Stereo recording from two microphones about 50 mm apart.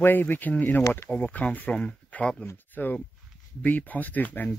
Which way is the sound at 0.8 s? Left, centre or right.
Left.